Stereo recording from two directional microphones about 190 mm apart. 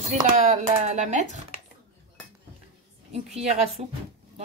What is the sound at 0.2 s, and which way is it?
Speech, 40° right (ahead or behind).